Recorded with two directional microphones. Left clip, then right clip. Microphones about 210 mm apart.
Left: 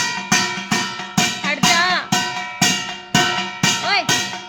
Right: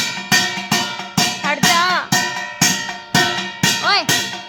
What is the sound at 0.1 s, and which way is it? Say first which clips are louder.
Music: right 2 dB; 20° right (ahead or behind).